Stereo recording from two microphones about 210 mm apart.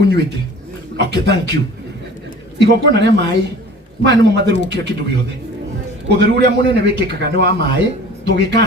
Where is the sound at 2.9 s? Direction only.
55° right (ahead or behind).